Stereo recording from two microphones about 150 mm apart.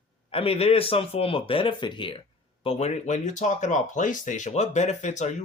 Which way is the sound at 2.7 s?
50° left (ahead or behind).